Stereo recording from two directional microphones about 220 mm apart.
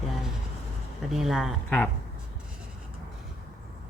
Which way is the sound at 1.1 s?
Centre (ahead or behind).